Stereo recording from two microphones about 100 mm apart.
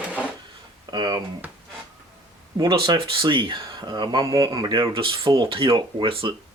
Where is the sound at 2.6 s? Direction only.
50° right (ahead or behind).